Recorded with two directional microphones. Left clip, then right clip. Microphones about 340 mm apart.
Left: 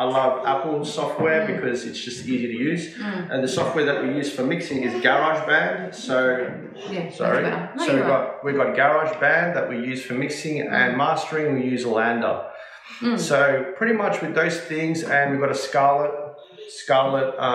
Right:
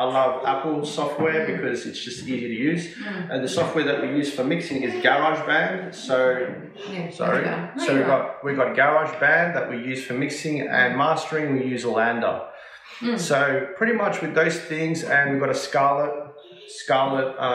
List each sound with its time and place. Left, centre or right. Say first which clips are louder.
0.0 s speech: left 1 dB; centre